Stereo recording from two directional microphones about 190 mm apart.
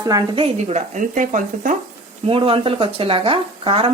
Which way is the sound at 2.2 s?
30° right (ahead or behind).